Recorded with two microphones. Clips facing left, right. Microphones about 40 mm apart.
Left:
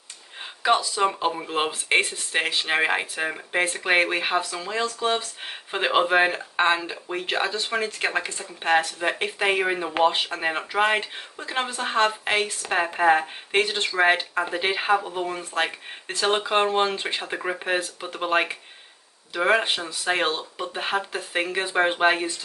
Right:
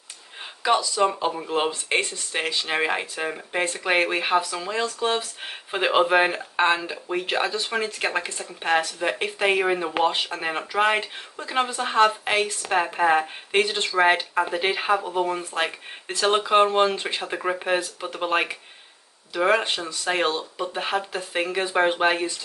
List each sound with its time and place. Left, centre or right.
0.6 s speech: centre